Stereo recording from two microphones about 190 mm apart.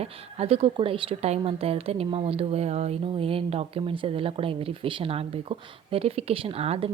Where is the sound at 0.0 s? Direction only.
30° right (ahead or behind).